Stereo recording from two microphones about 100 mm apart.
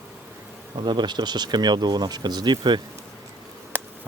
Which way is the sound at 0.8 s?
50° right (ahead or behind).